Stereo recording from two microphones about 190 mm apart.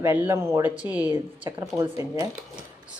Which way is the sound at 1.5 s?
20° right (ahead or behind).